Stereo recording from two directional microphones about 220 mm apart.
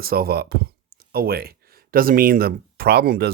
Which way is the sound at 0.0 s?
45° right (ahead or behind).